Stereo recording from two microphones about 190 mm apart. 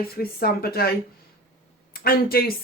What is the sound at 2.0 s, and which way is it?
Speech, 50° left (ahead or behind).